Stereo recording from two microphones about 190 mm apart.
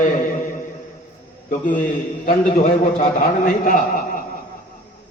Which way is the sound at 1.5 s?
45° left (ahead or behind).